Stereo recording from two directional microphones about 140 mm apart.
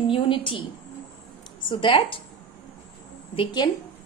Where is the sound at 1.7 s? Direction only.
40° left (ahead or behind).